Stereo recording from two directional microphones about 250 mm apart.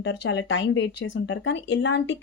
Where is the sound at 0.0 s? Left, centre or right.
Left.